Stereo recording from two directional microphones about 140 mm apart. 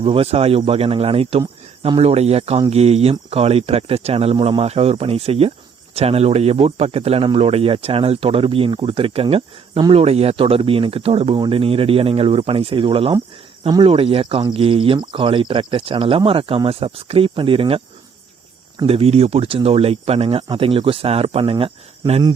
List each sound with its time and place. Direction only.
0.0 s speech: 40° right (ahead or behind)
18.9 s speech: 45° right (ahead or behind)